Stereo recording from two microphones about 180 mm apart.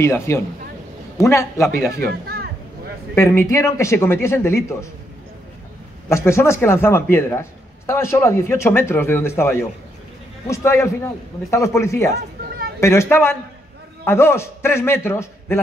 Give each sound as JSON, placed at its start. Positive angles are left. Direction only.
{"t": 0.0, "sound": "a man's voice", "side_deg": 15}
{"t": 1.9, "sound": "speech", "side_deg": -60}
{"t": 3.2, "sound": "a man's voice", "side_deg": 15}
{"t": 6.0, "sound": "a man's voice", "side_deg": 15}